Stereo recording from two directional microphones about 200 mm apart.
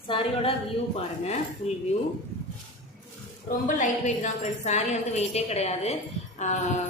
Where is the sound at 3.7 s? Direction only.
40° left (ahead or behind).